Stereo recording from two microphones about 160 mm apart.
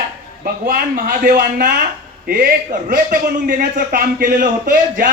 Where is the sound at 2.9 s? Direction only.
60° right (ahead or behind).